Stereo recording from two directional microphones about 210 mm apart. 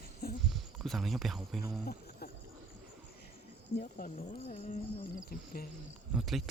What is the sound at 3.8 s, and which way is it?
Speech, 35° left (ahead or behind).